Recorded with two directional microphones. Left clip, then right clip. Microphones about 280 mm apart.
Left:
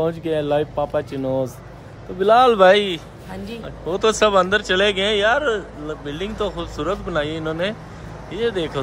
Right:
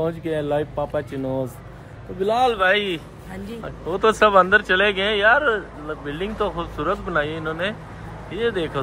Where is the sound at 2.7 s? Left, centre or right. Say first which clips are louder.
Left 4 dB; centre.